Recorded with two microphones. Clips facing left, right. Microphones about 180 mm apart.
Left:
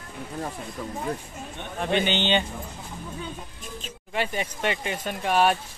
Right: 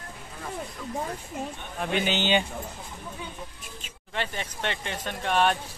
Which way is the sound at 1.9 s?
5° right (ahead or behind).